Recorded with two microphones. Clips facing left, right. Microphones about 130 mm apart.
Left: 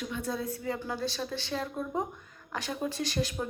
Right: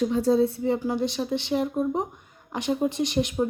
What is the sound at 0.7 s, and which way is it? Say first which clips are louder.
Speech: right 8 dB; 15° right (ahead or behind).